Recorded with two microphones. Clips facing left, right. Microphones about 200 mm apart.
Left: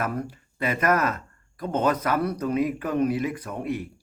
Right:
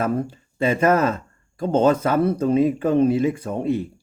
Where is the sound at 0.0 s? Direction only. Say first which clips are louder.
Right 6 dB; 25° right (ahead or behind).